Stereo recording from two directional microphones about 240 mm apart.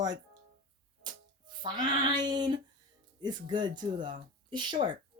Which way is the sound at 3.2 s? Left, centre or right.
Centre.